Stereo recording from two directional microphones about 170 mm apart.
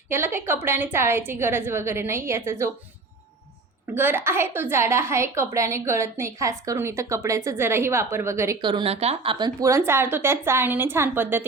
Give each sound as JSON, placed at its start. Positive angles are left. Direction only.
{"t": 0.1, "sound": "a woman's voice", "side_deg": -15}
{"t": 3.9, "sound": "a woman's voice", "side_deg": -10}